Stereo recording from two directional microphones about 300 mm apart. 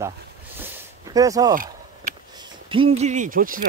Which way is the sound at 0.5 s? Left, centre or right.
Centre.